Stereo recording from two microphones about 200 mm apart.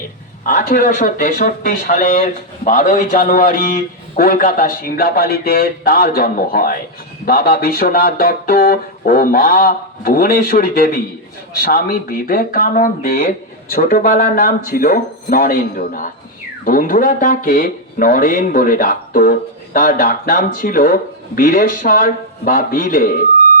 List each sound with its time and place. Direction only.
0.4 s speech: 45° left (ahead or behind)